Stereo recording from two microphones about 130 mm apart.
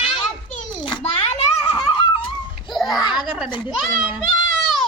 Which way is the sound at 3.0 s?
35° left (ahead or behind).